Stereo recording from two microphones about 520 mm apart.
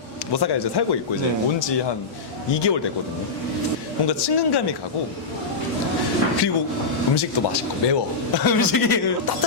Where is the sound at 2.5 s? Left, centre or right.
Left.